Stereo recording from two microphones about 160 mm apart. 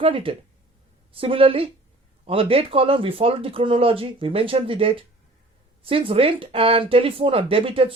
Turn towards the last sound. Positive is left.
turn(degrees=-35)  # may be behind; listen again after turning